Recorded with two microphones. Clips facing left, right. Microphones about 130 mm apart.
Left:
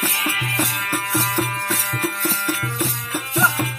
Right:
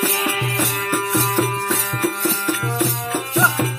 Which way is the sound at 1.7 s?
35° right (ahead or behind).